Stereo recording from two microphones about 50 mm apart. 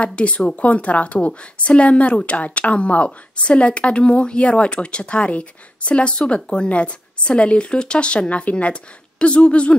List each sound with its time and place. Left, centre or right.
0.0 s speech: left